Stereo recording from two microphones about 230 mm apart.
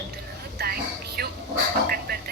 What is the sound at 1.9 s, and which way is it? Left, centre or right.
Music, right.